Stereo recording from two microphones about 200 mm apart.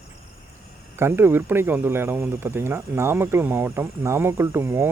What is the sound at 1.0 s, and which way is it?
Speech, 10° right (ahead or behind).